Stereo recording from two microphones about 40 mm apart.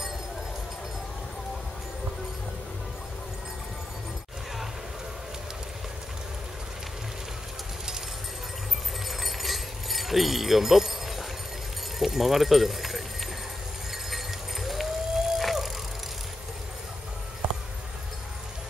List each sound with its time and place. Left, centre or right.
9.2 s a sound: centre
12.0 s speech: centre
14.1 s livestock: centre